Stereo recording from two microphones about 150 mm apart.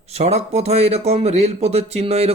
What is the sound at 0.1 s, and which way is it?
A man's voice, 45° right (ahead or behind).